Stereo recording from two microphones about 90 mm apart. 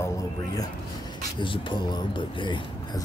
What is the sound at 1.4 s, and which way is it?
Speech, 65° left (ahead or behind).